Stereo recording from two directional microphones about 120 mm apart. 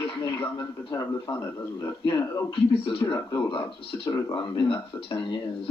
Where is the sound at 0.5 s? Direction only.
35° left (ahead or behind).